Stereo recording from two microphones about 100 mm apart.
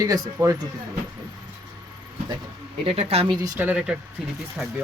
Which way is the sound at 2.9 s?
75° right (ahead or behind).